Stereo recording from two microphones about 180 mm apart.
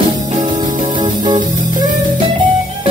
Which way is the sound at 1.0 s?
25° right (ahead or behind).